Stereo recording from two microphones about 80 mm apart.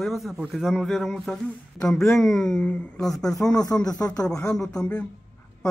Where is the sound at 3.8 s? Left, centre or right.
Left.